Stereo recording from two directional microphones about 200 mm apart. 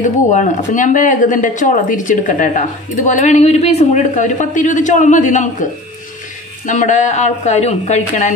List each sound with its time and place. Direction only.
0.0 s speech: 40° left (ahead or behind)